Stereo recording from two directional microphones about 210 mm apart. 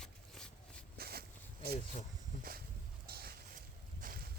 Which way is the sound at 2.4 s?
45° right (ahead or behind).